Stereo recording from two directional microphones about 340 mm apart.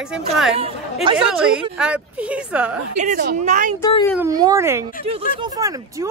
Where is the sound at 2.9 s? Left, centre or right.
Right.